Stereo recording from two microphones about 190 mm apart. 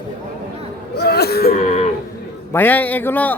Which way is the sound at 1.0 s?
55° left (ahead or behind).